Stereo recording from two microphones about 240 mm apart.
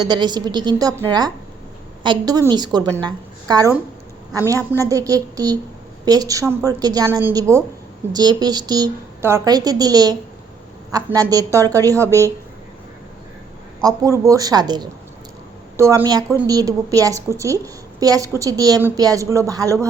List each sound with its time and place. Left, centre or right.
0.0 s a woman's voice: centre
4.8 s a woman's voice: centre
13.8 s a woman's voice: centre